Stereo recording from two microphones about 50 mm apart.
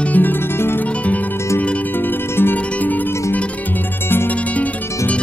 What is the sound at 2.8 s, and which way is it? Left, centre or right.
Music, left.